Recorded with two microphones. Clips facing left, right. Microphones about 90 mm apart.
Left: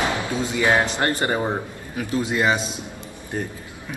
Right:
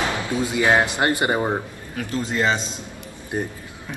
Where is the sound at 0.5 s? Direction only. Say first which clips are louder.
Right 1 dB; 20° right (ahead or behind).